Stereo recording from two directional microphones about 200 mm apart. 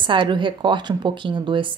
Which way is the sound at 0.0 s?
25° right (ahead or behind).